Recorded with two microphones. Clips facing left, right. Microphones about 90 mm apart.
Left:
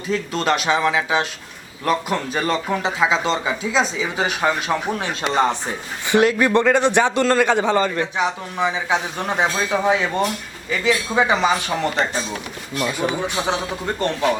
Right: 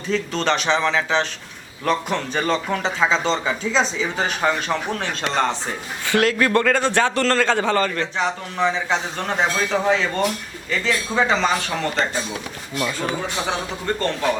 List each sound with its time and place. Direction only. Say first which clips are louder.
0.1 s a man's voice: left 1 dB; 5° left (ahead or behind)